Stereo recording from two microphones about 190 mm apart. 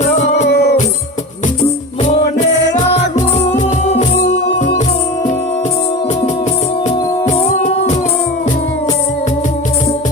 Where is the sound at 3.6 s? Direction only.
40° left (ahead or behind).